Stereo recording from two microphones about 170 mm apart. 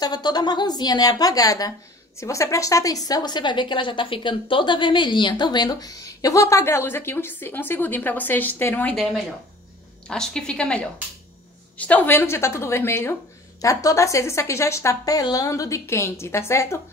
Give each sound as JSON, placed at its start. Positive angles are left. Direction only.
{"t": 0.0, "sound": "a woman's voice", "side_deg": 25}
{"t": 8.9, "sound": "a woman's voice", "side_deg": 0}